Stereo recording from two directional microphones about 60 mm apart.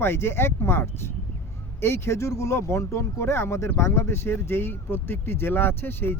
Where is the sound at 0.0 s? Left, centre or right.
Left.